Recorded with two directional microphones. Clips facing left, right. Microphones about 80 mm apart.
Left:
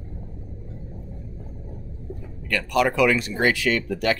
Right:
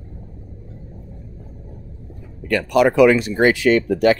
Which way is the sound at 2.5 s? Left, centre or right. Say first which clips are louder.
Right 6 dB; centre.